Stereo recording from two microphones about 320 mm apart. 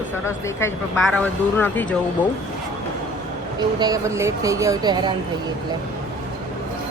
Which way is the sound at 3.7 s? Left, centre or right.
Centre.